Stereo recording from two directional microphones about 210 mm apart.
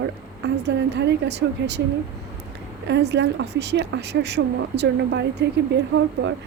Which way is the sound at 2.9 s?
55° right (ahead or behind).